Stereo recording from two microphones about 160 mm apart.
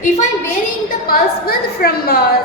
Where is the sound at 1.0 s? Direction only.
70° left (ahead or behind).